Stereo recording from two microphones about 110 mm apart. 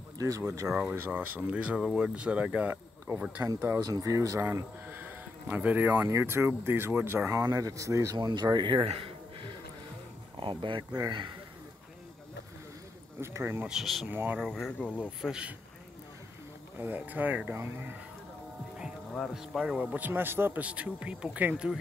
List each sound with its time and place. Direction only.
0.2 s speech: 30° right (ahead or behind)
0.7 s speech: 5° right (ahead or behind); by 8.2 s 30° right (ahead or behind)
8.2 s speech: 40° right (ahead or behind)
8.8 s a sound: 55° right (ahead or behind)
10.4 s speech: 50° right (ahead or behind)
13.2 s speech: 25° right (ahead or behind)
13.7 s speech: centre (ahead or behind)
14.0 s speech: 15° right (ahead or behind)
14.4 s speech: 5° left (ahead or behind)
15.0 s speech: 10° right (ahead or behind)
16.7 s speech: 15° right (ahead or behind)
19.3 s speech: 5° right (ahead or behind)